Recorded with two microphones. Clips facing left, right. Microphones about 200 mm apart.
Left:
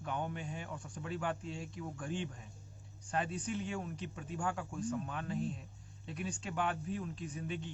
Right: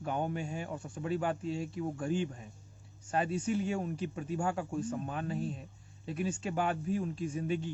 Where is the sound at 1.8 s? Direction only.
35° right (ahead or behind).